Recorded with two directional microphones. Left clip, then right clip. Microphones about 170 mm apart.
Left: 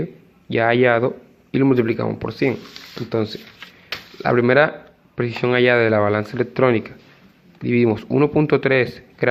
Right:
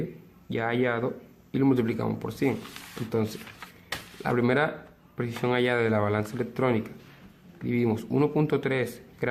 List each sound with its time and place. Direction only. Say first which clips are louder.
0.5 s speech: left 11 dB; 40° left (ahead or behind)